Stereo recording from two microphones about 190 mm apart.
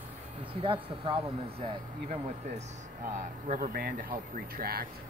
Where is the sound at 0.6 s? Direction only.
25° right (ahead or behind).